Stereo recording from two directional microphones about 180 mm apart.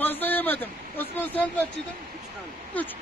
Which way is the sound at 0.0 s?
10° left (ahead or behind).